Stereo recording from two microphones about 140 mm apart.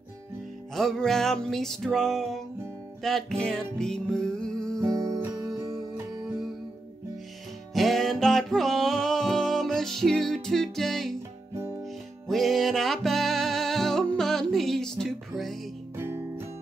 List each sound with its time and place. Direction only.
0.7 s music: centre (ahead or behind)
4.7 s music: 25° right (ahead or behind)
7.7 s music: centre (ahead or behind)
12.3 s music: centre (ahead or behind)
16.0 s music: 20° right (ahead or behind)